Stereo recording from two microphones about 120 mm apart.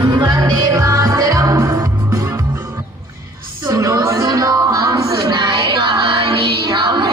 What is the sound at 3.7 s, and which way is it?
Music, 30° right (ahead or behind).